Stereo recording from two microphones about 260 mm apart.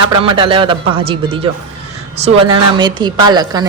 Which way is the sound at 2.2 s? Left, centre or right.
Centre.